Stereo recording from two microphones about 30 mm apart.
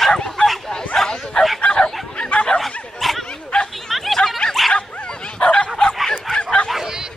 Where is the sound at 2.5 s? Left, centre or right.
Left.